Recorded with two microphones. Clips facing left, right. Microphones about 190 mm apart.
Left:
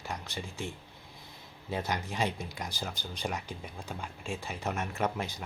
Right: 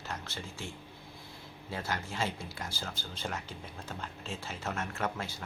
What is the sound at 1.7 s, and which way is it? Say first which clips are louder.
Speech: left 3 dB; 20° left (ahead or behind).